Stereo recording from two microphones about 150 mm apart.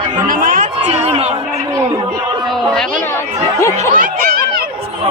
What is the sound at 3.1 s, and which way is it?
Speech, 20° left (ahead or behind).